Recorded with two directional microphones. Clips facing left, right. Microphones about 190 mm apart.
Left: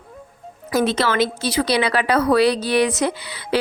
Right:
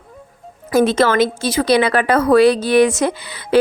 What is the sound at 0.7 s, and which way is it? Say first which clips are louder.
A woman's voice: right 5 dB; 50° right (ahead or behind).